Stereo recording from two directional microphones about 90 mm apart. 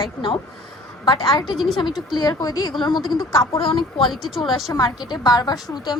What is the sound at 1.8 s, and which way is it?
A woman's voice, 55° left (ahead or behind).